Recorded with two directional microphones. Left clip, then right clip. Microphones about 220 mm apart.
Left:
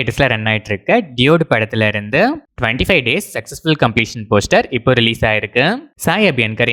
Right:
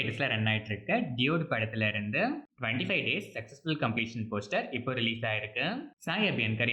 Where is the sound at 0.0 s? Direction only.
50° left (ahead or behind).